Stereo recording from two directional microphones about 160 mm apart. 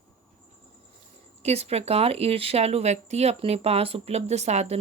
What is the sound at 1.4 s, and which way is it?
Speech, 40° right (ahead or behind).